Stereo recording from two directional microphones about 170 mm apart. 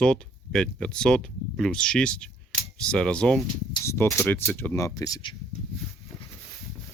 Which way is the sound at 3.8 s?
15° left (ahead or behind).